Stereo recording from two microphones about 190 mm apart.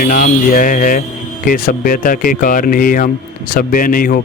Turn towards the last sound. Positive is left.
turn(degrees=45)  # may be behind; listen again after turning